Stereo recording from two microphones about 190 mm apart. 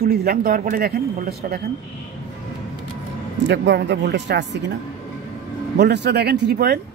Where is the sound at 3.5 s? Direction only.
65° right (ahead or behind).